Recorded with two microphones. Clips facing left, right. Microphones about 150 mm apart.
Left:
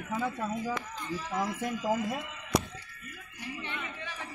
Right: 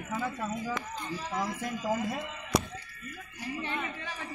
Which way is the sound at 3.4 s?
40° right (ahead or behind).